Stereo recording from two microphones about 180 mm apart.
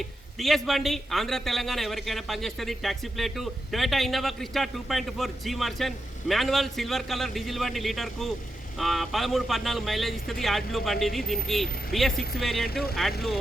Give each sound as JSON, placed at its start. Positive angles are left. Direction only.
{"t": 0.3, "sound": "a man's voice", "side_deg": 0}
{"t": 12.1, "sound": "speech", "side_deg": 60}
{"t": 12.4, "sound": "a man's voice", "side_deg": 0}
{"t": 12.6, "sound": "speech", "side_deg": 60}